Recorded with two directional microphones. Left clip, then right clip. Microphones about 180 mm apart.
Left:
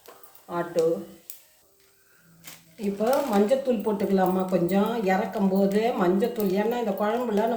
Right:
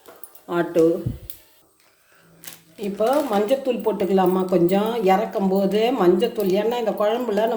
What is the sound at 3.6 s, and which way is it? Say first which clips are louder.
Speech: right 4 dB; 45° right (ahead or behind).